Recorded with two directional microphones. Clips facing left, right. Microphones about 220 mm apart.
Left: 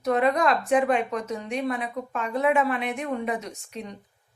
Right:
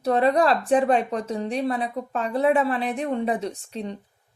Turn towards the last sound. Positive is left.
turn(degrees=-30)  # may be behind; listen again after turning